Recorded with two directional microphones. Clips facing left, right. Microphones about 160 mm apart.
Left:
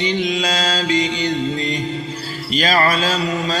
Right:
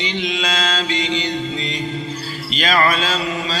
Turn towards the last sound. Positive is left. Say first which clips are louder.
# left 2 dB
turn(degrees=40)  # may be behind; listen again after turning